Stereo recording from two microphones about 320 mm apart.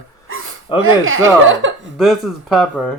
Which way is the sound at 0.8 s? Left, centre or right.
Right.